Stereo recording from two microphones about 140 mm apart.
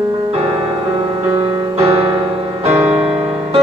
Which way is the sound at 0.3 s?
40° right (ahead or behind).